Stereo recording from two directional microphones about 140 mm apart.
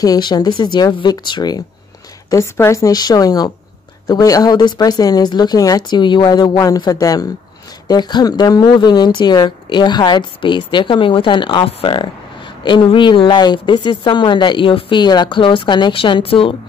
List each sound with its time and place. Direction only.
0.0 s a woman's voice: 30° left (ahead or behind)
2.3 s a woman's voice: 20° left (ahead or behind); by 16.5 s 40° left (ahead or behind)